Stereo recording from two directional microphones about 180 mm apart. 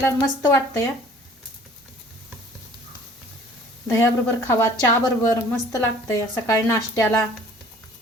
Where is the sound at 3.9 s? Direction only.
15° left (ahead or behind).